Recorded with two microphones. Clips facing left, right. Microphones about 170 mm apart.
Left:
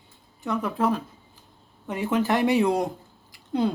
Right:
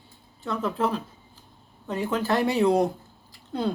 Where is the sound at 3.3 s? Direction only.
15° left (ahead or behind).